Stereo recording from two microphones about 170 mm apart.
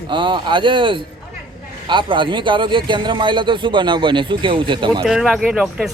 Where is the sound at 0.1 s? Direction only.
30° right (ahead or behind).